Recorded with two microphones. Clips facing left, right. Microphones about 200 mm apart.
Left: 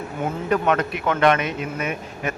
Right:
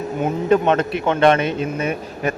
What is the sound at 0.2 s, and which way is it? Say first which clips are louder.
Speech: right 6 dB; 25° right (ahead or behind).